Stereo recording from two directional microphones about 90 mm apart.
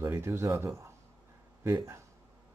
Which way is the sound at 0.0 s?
30° right (ahead or behind).